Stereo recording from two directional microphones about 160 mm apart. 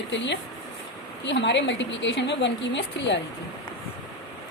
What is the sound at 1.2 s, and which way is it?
Speech, 90° left.